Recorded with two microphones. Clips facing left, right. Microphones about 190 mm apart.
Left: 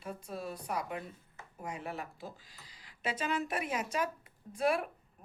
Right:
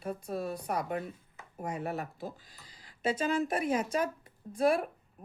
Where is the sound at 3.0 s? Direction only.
30° right (ahead or behind).